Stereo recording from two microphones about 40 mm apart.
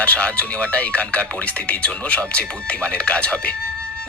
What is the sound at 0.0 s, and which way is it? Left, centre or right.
Speech, left.